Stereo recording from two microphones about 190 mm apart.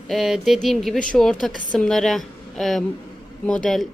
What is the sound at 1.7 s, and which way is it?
A woman's voice, centre (ahead or behind).